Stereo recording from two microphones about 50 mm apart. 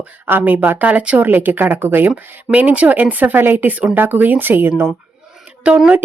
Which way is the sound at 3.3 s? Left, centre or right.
Right.